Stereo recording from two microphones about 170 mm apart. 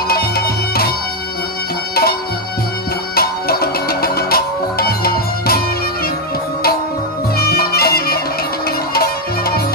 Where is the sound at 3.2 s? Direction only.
65° left (ahead or behind).